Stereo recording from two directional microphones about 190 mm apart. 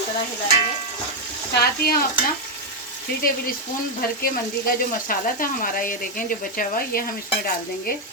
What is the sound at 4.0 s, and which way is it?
Speech, 50° left (ahead or behind).